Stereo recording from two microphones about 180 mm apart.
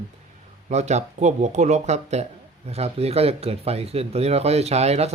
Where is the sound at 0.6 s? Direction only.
40° right (ahead or behind).